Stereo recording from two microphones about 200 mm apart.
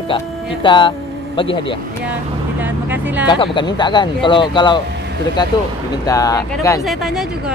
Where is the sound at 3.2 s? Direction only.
25° left (ahead or behind).